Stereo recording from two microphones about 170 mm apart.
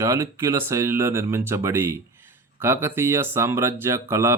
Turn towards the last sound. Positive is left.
turn(degrees=-15)  # may be behind; listen again after turning